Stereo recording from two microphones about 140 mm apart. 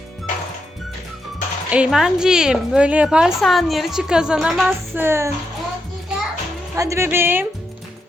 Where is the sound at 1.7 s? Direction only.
5° right (ahead or behind).